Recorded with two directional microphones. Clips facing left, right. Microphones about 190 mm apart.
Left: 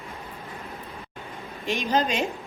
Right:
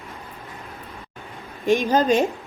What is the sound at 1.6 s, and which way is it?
Speech, 50° right (ahead or behind).